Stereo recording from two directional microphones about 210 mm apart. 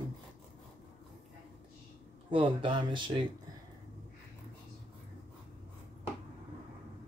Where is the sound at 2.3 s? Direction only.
25° right (ahead or behind).